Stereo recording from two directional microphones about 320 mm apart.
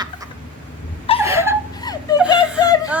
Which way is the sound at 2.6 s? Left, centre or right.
Centre.